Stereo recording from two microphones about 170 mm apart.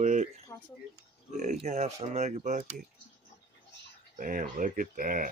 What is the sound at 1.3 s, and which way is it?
Speech, 45° right (ahead or behind).